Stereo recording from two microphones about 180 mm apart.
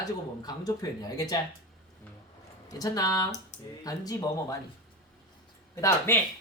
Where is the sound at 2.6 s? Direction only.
20° left (ahead or behind).